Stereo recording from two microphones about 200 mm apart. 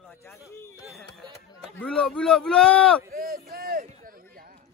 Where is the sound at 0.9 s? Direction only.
Centre (ahead or behind).